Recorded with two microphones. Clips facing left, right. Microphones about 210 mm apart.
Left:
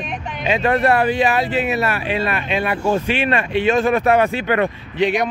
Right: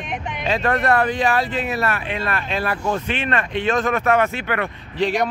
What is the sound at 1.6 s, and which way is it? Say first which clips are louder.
Speech: left 3 dB; 25° left (ahead or behind).